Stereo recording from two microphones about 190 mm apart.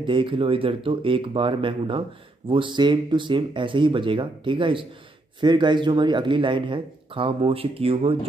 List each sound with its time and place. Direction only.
0.0 s speech: 25° right (ahead or behind)